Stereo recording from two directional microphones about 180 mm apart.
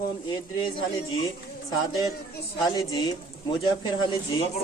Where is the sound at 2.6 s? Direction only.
20° left (ahead or behind).